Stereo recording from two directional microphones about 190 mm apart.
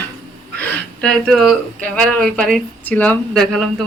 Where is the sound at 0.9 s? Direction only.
5° left (ahead or behind).